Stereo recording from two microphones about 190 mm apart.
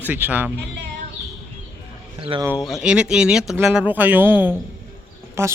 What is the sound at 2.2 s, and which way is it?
Speech, 30° right (ahead or behind).